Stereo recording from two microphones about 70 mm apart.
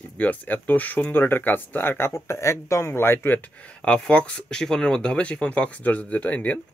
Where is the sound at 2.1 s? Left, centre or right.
Left.